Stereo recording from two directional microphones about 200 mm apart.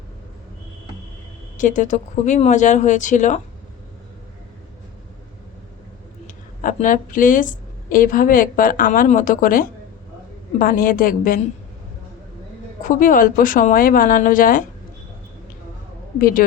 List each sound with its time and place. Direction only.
1.5 s speech: 40° left (ahead or behind)
6.2 s a woman's voice: 40° left (ahead or behind)
12.8 s a woman's voice: 40° left (ahead or behind)
16.1 s a woman's voice: 45° left (ahead or behind)